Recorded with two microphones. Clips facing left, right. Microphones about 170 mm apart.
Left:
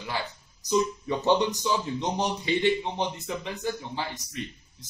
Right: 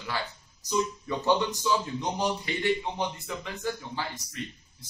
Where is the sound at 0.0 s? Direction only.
20° left (ahead or behind).